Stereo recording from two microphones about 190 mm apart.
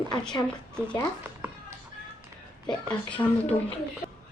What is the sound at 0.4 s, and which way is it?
Speech, 5° left (ahead or behind).